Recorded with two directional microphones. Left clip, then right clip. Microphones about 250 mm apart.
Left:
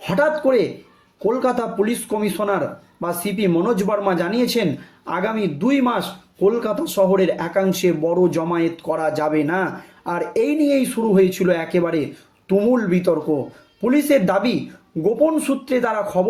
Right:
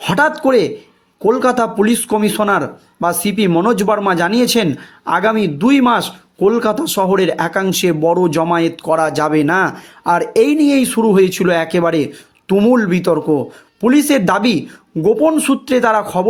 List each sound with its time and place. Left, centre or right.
0.0 s speech: right